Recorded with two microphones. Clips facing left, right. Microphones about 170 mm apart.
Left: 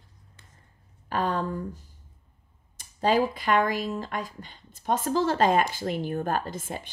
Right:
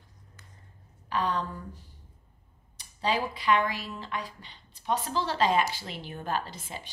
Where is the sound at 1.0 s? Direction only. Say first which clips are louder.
Left 3 dB; 50° left (ahead or behind).